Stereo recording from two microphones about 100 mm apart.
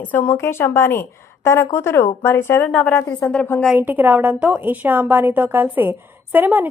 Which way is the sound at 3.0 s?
25° left (ahead or behind).